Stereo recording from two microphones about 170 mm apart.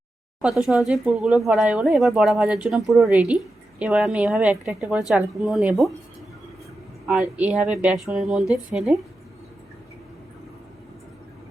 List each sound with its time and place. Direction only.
0.4 s a woman's voice: 5° right (ahead or behind)
7.1 s speech: 5° right (ahead or behind)